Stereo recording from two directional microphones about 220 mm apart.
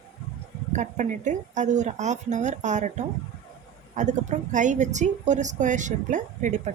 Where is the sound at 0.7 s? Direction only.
35° right (ahead or behind).